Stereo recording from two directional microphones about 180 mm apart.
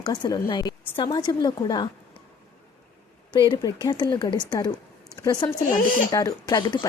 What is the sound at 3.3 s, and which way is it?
A woman's voice, 25° left (ahead or behind).